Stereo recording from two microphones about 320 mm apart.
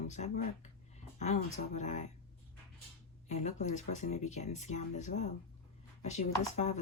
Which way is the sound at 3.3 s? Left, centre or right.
Left.